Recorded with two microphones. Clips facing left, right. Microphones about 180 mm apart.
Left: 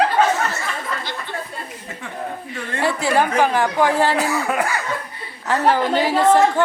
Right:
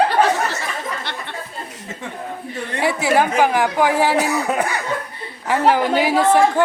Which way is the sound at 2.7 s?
10° right (ahead or behind).